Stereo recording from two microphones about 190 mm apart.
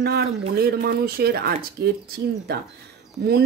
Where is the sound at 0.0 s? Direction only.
55° right (ahead or behind).